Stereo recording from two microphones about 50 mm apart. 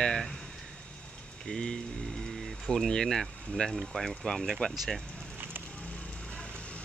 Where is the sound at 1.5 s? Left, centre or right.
Centre.